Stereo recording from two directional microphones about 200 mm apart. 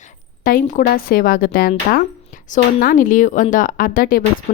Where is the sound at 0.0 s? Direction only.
40° left (ahead or behind).